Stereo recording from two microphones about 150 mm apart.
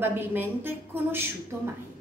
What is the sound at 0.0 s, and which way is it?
A woman's voice, 15° right (ahead or behind).